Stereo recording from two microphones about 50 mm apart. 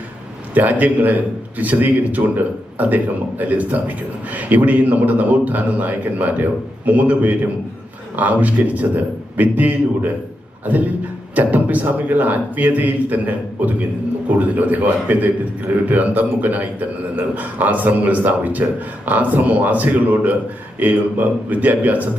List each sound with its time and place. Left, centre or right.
0.5 s a man's voice: right